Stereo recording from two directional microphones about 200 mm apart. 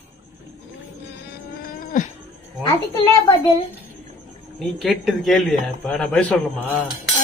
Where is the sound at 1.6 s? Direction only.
45° left (ahead or behind).